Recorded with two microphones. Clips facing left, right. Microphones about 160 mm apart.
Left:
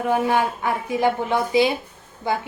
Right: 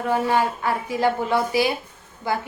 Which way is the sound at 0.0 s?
15° left (ahead or behind).